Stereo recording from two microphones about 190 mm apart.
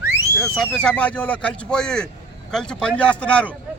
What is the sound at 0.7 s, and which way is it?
Speech, 5° left (ahead or behind).